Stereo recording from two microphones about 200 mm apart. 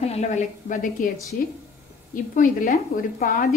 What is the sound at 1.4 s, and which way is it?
Speech, 45° left (ahead or behind).